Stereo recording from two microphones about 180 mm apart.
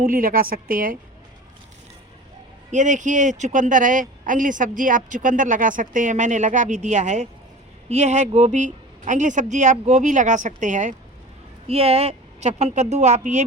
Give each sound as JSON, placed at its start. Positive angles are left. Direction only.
{"t": 0.0, "sound": "speech", "side_deg": -50}
{"t": 2.7, "sound": "speech", "side_deg": -45}